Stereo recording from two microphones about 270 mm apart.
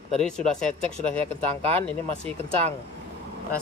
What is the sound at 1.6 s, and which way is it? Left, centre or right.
Speech, right.